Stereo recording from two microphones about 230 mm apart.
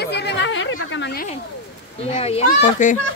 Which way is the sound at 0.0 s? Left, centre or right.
Left.